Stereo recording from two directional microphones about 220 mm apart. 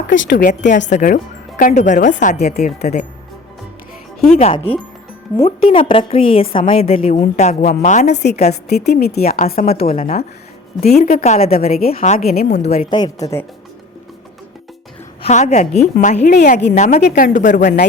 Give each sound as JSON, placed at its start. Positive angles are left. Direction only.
{"t": 0.1, "sound": "a woman's voice", "side_deg": 50}
{"t": 0.4, "sound": "speech", "side_deg": 35}
{"t": 4.4, "sound": "a woman's voice", "side_deg": 25}
{"t": 8.2, "sound": "a woman's voice", "side_deg": 45}
{"t": 9.8, "sound": "a woman's voice", "side_deg": 25}
{"t": 12.2, "sound": "a woman's voice", "side_deg": 45}
{"t": 15.2, "sound": "speech", "side_deg": 30}